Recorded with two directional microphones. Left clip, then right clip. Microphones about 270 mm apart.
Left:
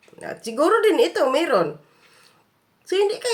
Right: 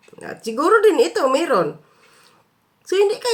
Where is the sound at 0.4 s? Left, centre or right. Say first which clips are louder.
Right 3 dB; centre.